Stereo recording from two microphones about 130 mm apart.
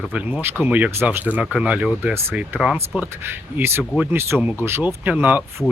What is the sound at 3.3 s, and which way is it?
Speech, 15° right (ahead or behind).